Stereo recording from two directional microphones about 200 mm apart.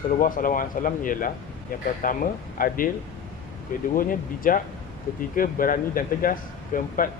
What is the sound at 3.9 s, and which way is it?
Speech, 45° left (ahead or behind).